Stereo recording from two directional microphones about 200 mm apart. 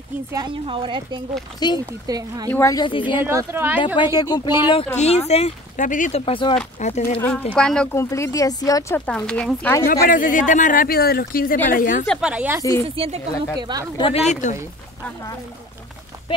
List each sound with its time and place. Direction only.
0.3 s a woman's voice: 20° right (ahead or behind)
1.6 s speech: 20° left (ahead or behind)
2.0 s a woman's voice: 20° right (ahead or behind)
2.5 s speech: 15° left (ahead or behind)
3.2 s speech: 10° right (ahead or behind)
3.8 s speech: 25° left (ahead or behind)
4.9 s speech: 30° left (ahead or behind)
7.2 s speech: 10° left (ahead or behind)
9.8 s speech: 45° left (ahead or behind)
12.1 s a woman's voice: 5° right (ahead or behind)
12.8 s a woman's voice: 30° right (ahead or behind)
13.9 s speech: 30° left (ahead or behind)
16.3 s speech: 25° left (ahead or behind)